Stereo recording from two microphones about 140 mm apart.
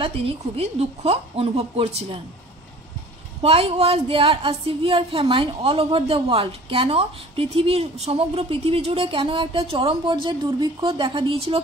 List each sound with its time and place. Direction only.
0.0 s speech: 45° right (ahead or behind)
3.4 s a woman's voice: 45° right (ahead or behind)